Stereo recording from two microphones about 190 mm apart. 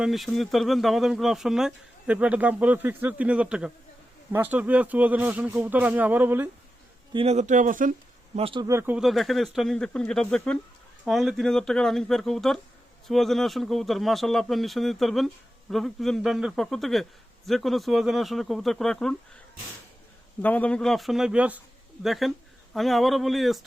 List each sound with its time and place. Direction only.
0.0 s speech: centre (ahead or behind)
7.1 s speech: 30° right (ahead or behind)
8.4 s speech: 30° right (ahead or behind)
8.6 s speech: 15° right (ahead or behind)
9.0 s speech: centre (ahead or behind)
20.4 s speech: 10° left (ahead or behind)